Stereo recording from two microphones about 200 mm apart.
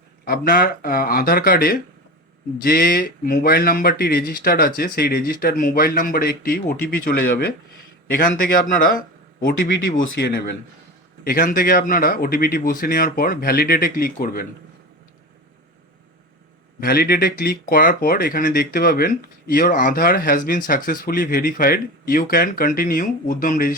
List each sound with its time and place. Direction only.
0.3 s speech: 45° left (ahead or behind)
16.8 s speech: 50° left (ahead or behind)